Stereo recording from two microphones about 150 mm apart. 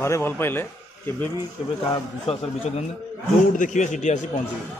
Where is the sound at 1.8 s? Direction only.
40° left (ahead or behind).